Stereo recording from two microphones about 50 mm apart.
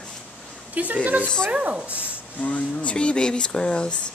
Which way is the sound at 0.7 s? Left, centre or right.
Right.